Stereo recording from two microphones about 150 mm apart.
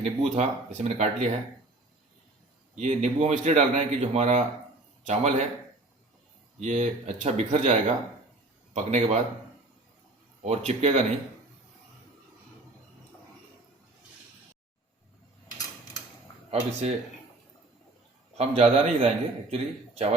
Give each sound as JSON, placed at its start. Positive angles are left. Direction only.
{"t": 0.0, "sound": "a man's voice", "side_deg": -45}
{"t": 2.7, "sound": "a man's voice", "side_deg": -50}
{"t": 6.6, "sound": "a man's voice", "side_deg": -50}
{"t": 10.4, "sound": "a man's voice", "side_deg": -45}
{"t": 16.8, "sound": "a man's voice", "side_deg": -45}
{"t": 18.3, "sound": "a man's voice", "side_deg": -45}